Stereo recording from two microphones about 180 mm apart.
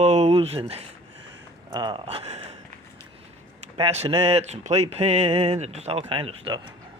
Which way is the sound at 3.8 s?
35° right (ahead or behind).